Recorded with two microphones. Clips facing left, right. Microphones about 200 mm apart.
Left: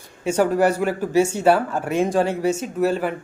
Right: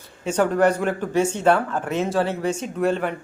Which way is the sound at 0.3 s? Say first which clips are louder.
Left 1 dB; 10° left (ahead or behind).